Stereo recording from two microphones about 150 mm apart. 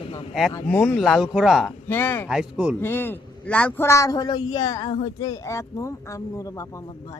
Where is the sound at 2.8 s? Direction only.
15° left (ahead or behind).